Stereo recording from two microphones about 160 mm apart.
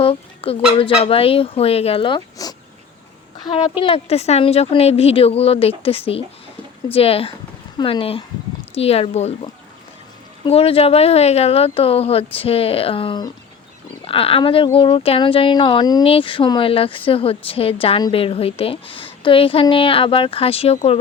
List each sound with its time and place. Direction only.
0.0 s a woman's voice: 35° left (ahead or behind)